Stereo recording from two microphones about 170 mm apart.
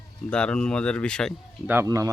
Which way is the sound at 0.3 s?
5° left (ahead or behind).